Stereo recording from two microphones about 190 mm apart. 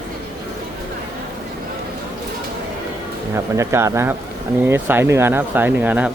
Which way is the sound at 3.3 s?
15° right (ahead or behind).